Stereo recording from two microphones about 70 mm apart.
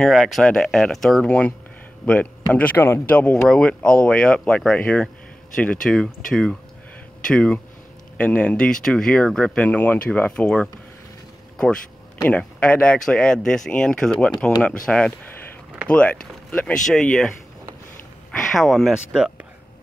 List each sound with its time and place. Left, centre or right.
0.1 s speech: centre
2.0 s speech: left
5.9 s speech: centre
9.7 s speech: left
11.5 s a sound: centre
12.3 s speech: centre
18.4 s speech: centre